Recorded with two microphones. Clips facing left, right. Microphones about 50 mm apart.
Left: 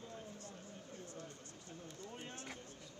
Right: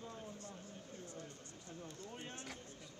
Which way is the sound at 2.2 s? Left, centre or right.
Right.